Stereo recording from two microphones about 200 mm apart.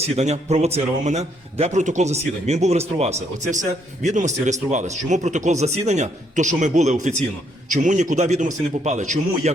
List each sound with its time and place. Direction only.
0.0 s a man's voice: 35° right (ahead or behind)